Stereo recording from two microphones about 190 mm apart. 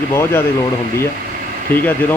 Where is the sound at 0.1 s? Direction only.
15° left (ahead or behind).